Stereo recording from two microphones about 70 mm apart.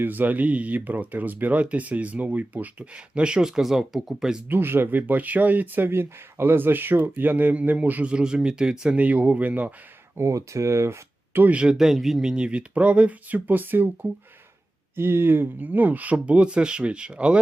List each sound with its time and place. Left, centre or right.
0.0 s speech: right; by 4.4 s centre
4.4 s speech: right
10.2 s speech: right
11.3 s speech: right
11.6 s speech: centre